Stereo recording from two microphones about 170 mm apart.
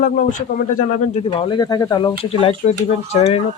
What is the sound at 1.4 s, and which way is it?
Speech, 25° left (ahead or behind).